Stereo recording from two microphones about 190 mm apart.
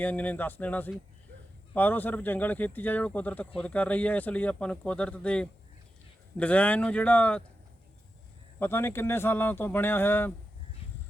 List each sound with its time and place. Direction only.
0.0 s speech: 10° left (ahead or behind)
8.5 s speech: 10° left (ahead or behind)